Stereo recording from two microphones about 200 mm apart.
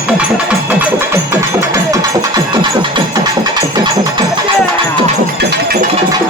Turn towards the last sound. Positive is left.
turn(degrees=-50)  # may be behind; listen again after turning